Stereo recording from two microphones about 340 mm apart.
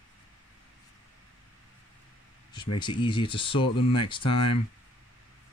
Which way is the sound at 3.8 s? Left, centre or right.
Left.